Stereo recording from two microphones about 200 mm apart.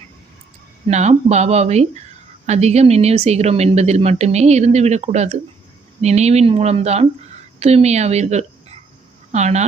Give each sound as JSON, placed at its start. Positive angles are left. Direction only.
{"t": 0.9, "sound": "speech", "side_deg": -35}